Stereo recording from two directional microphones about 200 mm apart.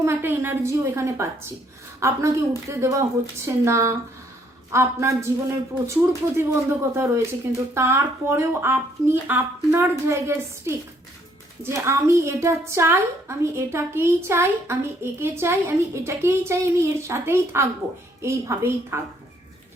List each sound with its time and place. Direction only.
0.0 s a woman's voice: 10° right (ahead or behind)